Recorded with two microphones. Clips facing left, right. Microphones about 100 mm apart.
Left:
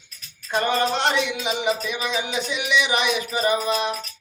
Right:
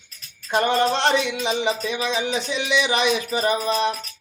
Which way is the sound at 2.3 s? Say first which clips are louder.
Right 1 dB; 25° right (ahead or behind).